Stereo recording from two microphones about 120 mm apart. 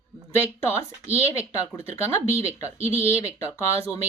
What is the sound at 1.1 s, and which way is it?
Speech, 25° left (ahead or behind).